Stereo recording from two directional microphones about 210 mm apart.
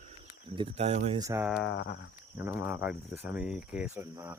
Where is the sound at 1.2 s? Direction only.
15° right (ahead or behind).